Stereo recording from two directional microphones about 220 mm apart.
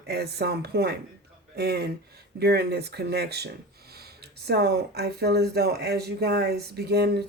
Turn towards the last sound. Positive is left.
turn(degrees=-45)  # may be behind; listen again after turning